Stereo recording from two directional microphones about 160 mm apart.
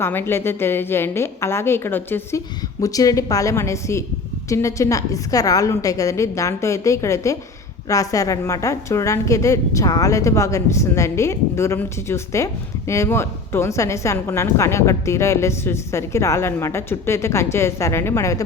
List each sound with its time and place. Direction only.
0.0 s a woman's voice: 15° left (ahead or behind)